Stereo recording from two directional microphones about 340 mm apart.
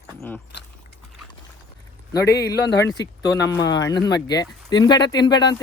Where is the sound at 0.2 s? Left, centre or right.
Centre.